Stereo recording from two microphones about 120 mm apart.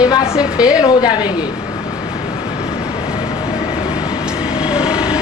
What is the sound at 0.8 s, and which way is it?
Speech, 35° left (ahead or behind).